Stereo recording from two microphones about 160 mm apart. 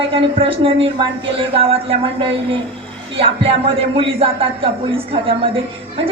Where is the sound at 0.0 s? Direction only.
35° right (ahead or behind).